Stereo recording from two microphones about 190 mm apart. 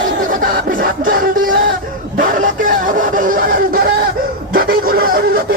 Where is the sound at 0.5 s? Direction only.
50° right (ahead or behind).